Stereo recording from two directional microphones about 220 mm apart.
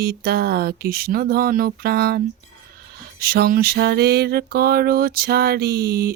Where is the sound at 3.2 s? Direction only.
45° right (ahead or behind).